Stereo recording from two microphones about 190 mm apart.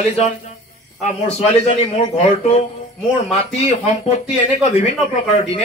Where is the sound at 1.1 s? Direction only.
35° left (ahead or behind).